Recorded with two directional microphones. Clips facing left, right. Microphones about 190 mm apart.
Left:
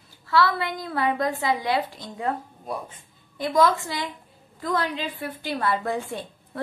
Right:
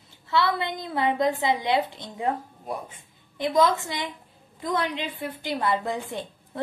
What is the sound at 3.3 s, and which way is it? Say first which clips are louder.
A woman's voice: left 1 dB; 20° right (ahead or behind).